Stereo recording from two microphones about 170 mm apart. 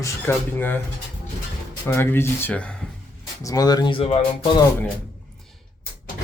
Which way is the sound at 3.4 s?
20° left (ahead or behind).